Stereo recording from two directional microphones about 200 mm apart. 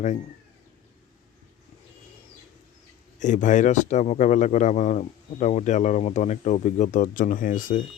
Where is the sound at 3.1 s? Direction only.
40° left (ahead or behind).